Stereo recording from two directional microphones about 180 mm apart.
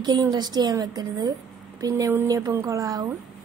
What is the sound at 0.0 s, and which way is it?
A woman's voice, 25° right (ahead or behind).